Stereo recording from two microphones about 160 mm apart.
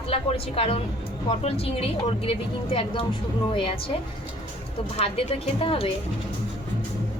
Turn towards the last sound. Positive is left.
turn(degrees=35)  # may be behind; listen again after turning